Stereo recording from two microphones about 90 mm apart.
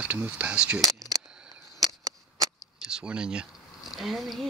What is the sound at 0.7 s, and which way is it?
Speech, 5° left (ahead or behind).